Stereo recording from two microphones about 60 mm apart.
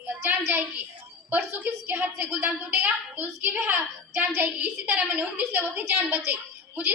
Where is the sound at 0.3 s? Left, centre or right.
Right.